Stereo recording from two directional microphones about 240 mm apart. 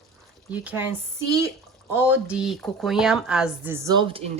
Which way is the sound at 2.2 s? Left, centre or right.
Centre.